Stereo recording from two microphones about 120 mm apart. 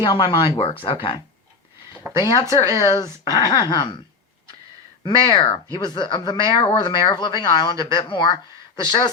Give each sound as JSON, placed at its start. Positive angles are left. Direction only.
{"t": 0.0, "sound": "speech", "side_deg": 40}
{"t": 2.1, "sound": "speech", "side_deg": 35}
{"t": 5.0, "sound": "speech", "side_deg": 40}